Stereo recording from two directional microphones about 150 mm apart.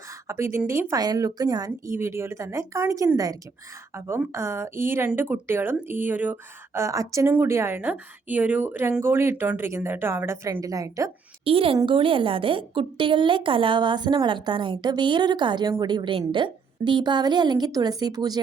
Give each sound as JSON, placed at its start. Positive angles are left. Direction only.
{"t": 0.3, "sound": "a woman's voice", "side_deg": -20}
{"t": 11.4, "sound": "a woman's voice", "side_deg": -40}